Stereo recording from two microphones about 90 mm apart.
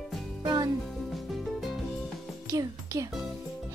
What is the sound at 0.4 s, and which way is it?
Music, 45° right (ahead or behind).